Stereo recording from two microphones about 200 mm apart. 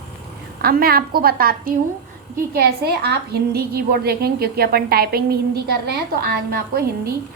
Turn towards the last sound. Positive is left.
turn(degrees=-50)  # may be behind; listen again after turning